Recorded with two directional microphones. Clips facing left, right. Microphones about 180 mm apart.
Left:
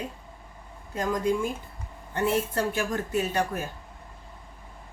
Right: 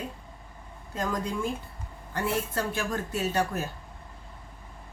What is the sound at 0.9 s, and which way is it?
A woman's voice, 15° left (ahead or behind).